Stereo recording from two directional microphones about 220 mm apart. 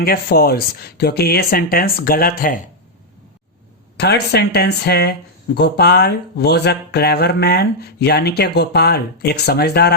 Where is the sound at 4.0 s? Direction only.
50° left (ahead or behind).